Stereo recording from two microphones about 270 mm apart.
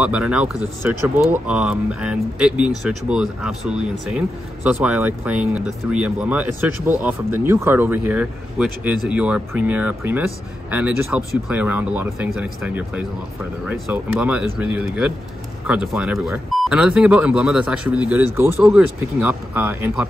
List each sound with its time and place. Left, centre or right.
0.0 s speech: centre